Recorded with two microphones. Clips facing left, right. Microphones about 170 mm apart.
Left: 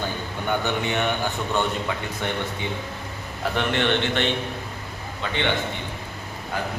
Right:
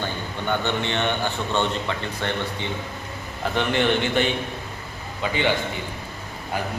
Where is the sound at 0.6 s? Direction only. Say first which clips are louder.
Even; 10° left (ahead or behind).